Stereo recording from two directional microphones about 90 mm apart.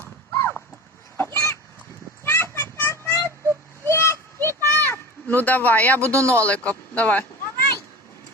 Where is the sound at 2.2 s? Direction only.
30° left (ahead or behind).